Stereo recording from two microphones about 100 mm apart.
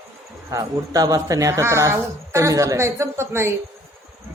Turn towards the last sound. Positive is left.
turn(degrees=-25)  # may be behind; listen again after turning